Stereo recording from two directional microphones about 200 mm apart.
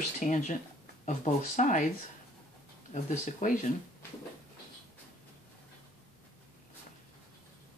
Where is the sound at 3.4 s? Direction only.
40° left (ahead or behind).